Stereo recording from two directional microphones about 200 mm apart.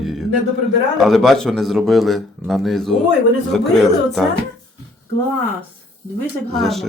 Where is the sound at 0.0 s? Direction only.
Centre (ahead or behind).